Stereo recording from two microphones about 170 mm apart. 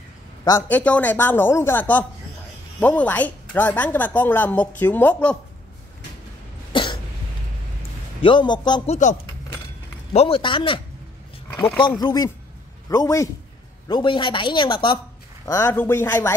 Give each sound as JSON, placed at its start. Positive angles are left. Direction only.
{"t": 0.5, "sound": "a woman's voice", "side_deg": 10}
{"t": 6.7, "sound": "cough", "side_deg": 30}
{"t": 8.2, "sound": "speech", "side_deg": 30}
{"t": 8.8, "sound": "speech", "side_deg": 40}
{"t": 10.1, "sound": "speech", "side_deg": 35}
{"t": 11.4, "sound": "a woman's voice", "side_deg": 15}
{"t": 15.4, "sound": "a woman's voice", "side_deg": 15}